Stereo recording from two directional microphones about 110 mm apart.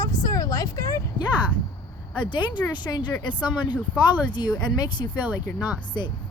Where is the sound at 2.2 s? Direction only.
45° left (ahead or behind).